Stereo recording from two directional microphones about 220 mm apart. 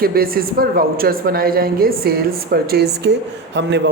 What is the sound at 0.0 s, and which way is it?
Speech, 45° right (ahead or behind).